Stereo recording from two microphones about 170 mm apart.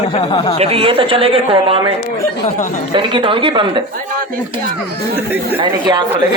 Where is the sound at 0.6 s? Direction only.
35° right (ahead or behind).